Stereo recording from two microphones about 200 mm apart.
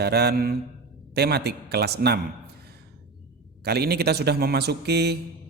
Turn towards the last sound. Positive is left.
turn(degrees=-55)  # may be behind; listen again after turning